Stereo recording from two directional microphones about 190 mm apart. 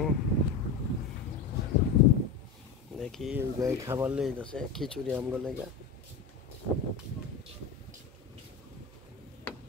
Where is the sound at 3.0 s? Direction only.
Centre (ahead or behind).